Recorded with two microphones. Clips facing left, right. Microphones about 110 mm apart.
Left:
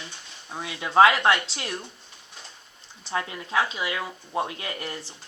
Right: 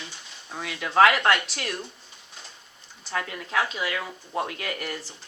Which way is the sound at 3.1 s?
20° left (ahead or behind).